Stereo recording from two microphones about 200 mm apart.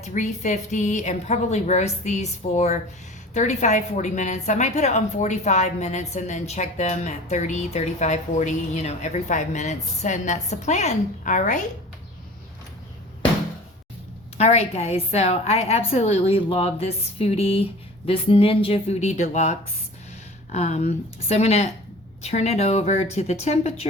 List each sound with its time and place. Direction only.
0.0 s a woman's voice: 35° left (ahead or behind)
14.3 s a woman's voice: 30° left (ahead or behind)